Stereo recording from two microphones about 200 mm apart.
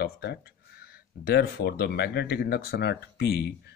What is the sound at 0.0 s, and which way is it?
Speech, 55° left (ahead or behind).